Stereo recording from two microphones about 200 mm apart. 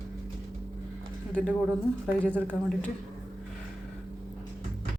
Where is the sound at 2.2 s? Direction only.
5° left (ahead or behind).